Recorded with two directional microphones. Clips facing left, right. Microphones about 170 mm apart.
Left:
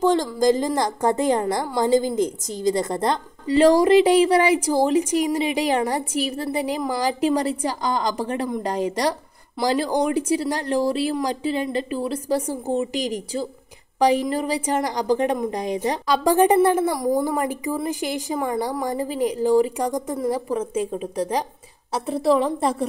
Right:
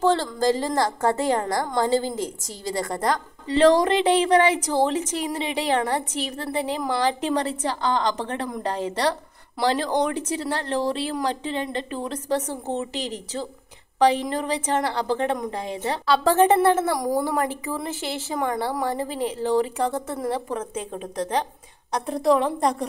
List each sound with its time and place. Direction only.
0.0 s a woman's voice: 15° left (ahead or behind)
3.4 s a woman's voice: 10° left (ahead or behind)